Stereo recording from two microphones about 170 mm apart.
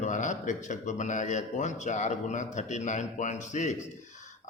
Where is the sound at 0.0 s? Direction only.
45° left (ahead or behind).